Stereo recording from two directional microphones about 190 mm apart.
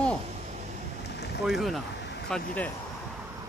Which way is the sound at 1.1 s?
60° left (ahead or behind).